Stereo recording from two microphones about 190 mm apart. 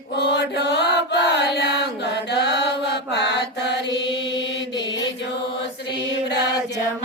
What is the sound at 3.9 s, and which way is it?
Mantra, 65° left (ahead or behind).